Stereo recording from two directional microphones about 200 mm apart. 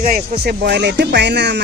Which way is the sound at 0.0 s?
50° right (ahead or behind).